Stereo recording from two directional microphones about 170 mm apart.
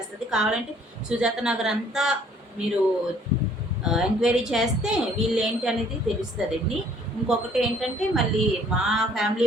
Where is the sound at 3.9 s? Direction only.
5° right (ahead or behind).